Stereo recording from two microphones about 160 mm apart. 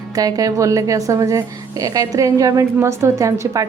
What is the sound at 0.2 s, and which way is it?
A woman's voice, 20° right (ahead or behind).